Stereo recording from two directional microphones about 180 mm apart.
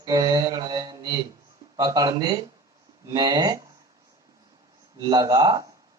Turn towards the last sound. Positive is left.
turn(degrees=-20)  # may be behind; listen again after turning